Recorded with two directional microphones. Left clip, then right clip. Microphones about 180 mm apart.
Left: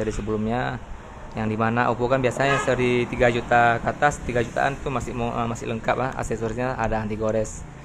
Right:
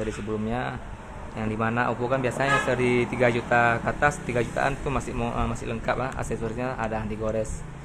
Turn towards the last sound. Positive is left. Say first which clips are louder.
# left 4 dB
turn(degrees=20)  # may be behind; listen again after turning